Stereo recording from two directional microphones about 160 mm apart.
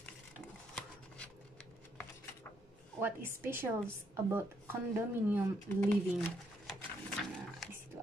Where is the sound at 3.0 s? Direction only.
15° right (ahead or behind).